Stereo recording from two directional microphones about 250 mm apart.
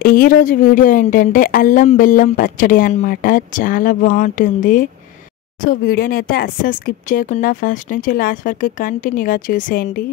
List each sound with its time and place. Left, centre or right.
0.0 s speech: left